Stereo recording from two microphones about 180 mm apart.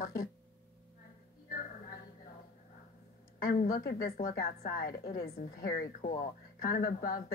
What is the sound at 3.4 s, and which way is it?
A woman's voice, 55° left (ahead or behind).